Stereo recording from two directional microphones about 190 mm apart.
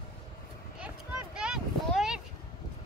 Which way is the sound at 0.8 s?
5° right (ahead or behind).